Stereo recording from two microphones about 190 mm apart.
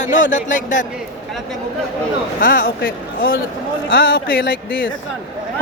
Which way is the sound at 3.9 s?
80° left.